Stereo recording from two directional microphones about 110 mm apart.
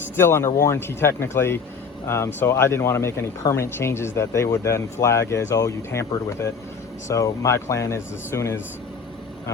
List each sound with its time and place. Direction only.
0.2 s speech: 25° left (ahead or behind)